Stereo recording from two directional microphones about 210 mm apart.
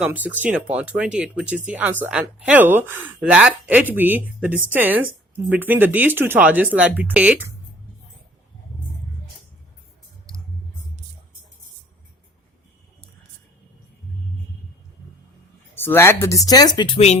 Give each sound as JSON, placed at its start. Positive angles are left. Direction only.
{"t": 0.0, "sound": "speech", "side_deg": -5}
{"t": 15.7, "sound": "speech", "side_deg": 10}